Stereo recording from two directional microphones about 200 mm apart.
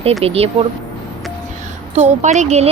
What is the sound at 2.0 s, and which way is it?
Speech, 35° right (ahead or behind).